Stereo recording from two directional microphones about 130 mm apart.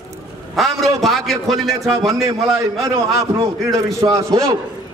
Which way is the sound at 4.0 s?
25° right (ahead or behind).